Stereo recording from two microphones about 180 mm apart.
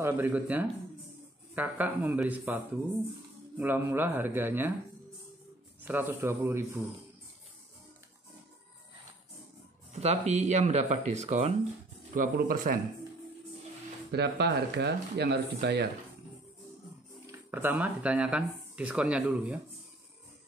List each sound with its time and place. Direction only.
0.0 s a man's voice: 10° right (ahead or behind)
5.9 s a man's voice: 10° right (ahead or behind)
9.9 s speech: 40° right (ahead or behind)
12.1 s speech: 50° right (ahead or behind)
14.1 s speech: 65° right (ahead or behind)
17.3 s speech: 10° right (ahead or behind)